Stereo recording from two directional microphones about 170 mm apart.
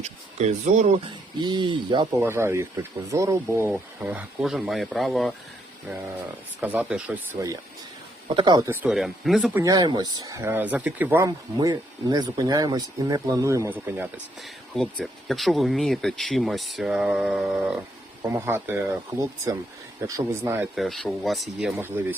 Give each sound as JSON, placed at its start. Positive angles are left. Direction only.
{"t": 0.0, "sound": "speech", "side_deg": -40}
{"t": 1.4, "sound": "speech", "side_deg": -25}
{"t": 2.2, "sound": "speech", "side_deg": -15}
{"t": 6.6, "sound": "speech", "side_deg": -10}
{"t": 8.6, "sound": "speech", "side_deg": -15}
{"t": 8.9, "sound": "speech", "side_deg": 0}
{"t": 9.6, "sound": "speech", "side_deg": -25}
{"t": 14.4, "sound": "speech", "side_deg": 0}
{"t": 20.0, "sound": "speech", "side_deg": -20}
{"t": 20.7, "sound": "speech", "side_deg": 0}
{"t": 21.7, "sound": "speech", "side_deg": -10}